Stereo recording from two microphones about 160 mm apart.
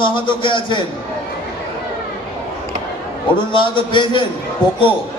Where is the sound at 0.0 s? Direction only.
30° left (ahead or behind).